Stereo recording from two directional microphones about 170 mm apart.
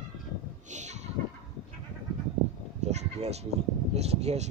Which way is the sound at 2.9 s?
40° right (ahead or behind).